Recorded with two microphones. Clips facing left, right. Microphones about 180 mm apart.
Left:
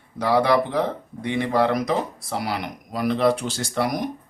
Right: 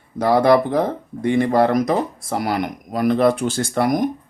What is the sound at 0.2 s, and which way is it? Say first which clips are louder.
Speech: right 5 dB; 45° right (ahead or behind).